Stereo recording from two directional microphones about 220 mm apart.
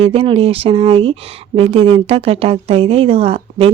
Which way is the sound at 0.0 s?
25° right (ahead or behind).